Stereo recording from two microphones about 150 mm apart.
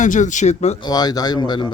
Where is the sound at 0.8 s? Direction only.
25° left (ahead or behind).